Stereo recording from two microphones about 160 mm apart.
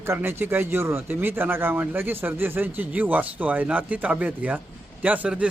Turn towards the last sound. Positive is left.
turn(degrees=-10)  # may be behind; listen again after turning